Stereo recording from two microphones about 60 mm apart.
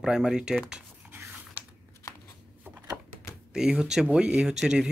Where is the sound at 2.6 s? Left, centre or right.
Right.